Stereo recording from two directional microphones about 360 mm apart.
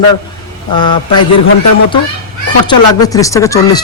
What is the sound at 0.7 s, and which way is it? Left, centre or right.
Speech, centre.